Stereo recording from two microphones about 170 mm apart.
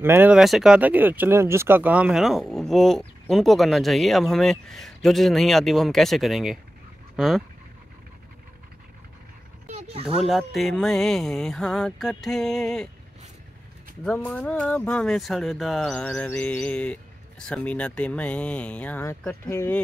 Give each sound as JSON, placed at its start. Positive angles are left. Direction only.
{"t": 0.0, "sound": "speech", "side_deg": -10}
{"t": 9.7, "sound": "a sound", "side_deg": -40}
{"t": 10.2, "sound": "speech", "side_deg": 0}
{"t": 14.0, "sound": "speech", "side_deg": 10}